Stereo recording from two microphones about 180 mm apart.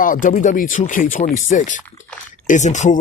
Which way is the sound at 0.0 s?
50° left (ahead or behind).